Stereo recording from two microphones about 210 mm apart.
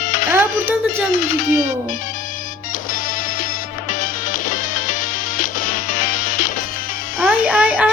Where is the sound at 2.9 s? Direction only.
40° left (ahead or behind).